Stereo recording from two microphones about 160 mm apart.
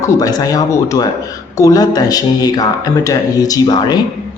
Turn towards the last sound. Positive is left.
turn(degrees=25)  # may be behind; listen again after turning